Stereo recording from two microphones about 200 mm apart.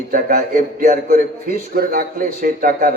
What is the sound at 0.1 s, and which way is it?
A man's voice, 45° right (ahead or behind).